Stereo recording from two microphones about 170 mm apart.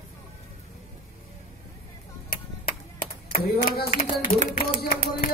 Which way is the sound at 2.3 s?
60° left (ahead or behind).